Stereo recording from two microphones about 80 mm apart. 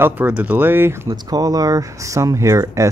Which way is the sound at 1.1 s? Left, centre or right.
Right.